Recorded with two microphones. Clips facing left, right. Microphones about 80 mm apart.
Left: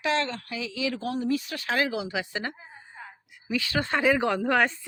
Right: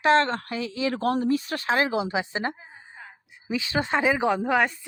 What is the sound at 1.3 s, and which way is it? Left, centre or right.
Speech, right.